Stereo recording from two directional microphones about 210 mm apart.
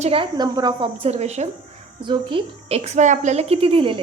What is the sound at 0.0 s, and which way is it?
Speech, 25° right (ahead or behind).